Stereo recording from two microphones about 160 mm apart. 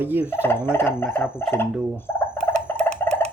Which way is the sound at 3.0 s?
15° left (ahead or behind).